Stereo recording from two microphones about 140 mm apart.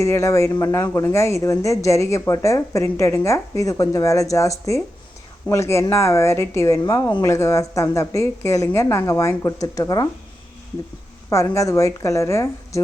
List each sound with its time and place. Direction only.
0.0 s speech: 20° left (ahead or behind)
11.3 s speech: 20° left (ahead or behind)